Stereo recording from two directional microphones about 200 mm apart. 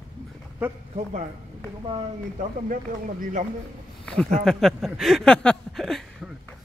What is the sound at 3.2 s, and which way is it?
Speech, 40° right (ahead or behind).